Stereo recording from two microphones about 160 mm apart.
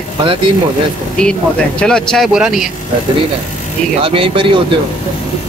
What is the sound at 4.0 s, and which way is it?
Speech, 35° right (ahead or behind).